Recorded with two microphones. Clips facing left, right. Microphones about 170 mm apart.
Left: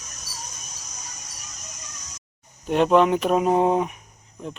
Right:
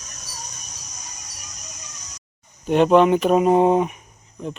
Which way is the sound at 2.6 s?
Centre (ahead or behind).